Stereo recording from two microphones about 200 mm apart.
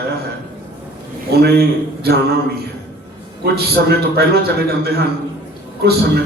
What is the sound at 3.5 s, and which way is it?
A man's voice, 50° right (ahead or behind).